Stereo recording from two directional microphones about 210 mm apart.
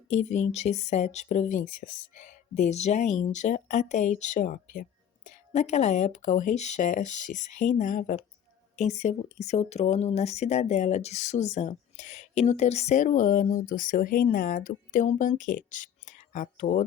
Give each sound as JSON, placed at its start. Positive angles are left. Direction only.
{"t": 0.1, "sound": "speech", "side_deg": 35}